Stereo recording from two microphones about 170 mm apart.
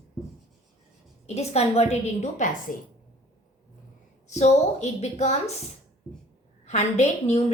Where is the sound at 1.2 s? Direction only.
40° left (ahead or behind).